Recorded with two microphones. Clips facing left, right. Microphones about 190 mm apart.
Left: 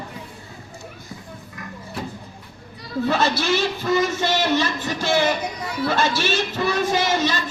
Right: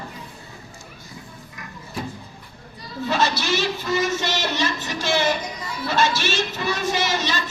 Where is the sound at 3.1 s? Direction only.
50° left (ahead or behind).